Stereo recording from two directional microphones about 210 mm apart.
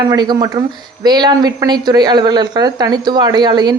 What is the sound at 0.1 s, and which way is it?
A woman's voice, 20° right (ahead or behind).